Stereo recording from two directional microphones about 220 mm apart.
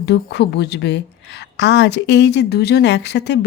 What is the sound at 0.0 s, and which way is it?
A woman's voice, 50° left (ahead or behind).